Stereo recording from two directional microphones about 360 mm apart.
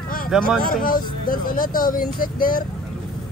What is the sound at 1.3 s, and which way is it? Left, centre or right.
Speech, left.